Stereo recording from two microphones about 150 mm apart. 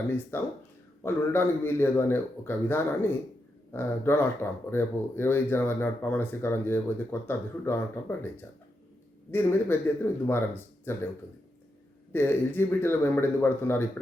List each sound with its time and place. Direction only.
0.3 s speech: 15° left (ahead or behind)
12.1 s speech: 15° left (ahead or behind)